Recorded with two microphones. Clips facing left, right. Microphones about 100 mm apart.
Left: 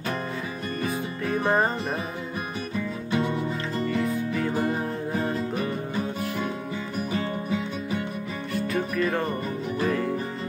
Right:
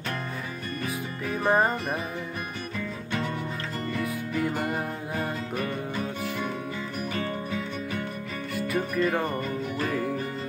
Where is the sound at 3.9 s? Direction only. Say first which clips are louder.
Left 4 dB; 5° right (ahead or behind).